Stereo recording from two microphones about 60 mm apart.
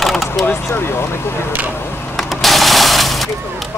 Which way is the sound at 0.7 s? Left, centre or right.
Left.